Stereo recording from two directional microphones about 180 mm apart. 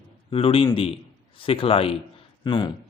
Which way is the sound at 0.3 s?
30° left (ahead or behind).